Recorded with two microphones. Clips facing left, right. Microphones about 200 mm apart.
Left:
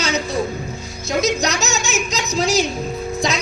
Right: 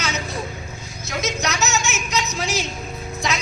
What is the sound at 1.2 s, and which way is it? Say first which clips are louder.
Speech: left 3 dB; 35° left (ahead or behind).